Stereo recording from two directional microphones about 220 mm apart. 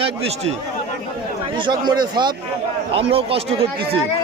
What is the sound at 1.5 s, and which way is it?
Speech, 20° right (ahead or behind).